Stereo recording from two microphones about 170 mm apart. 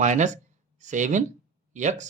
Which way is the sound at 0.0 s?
45° right (ahead or behind).